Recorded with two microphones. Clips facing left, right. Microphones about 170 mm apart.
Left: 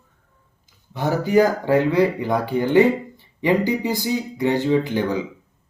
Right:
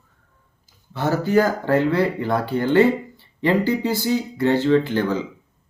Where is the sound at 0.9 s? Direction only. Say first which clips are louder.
Left 1 dB; 15° left (ahead or behind).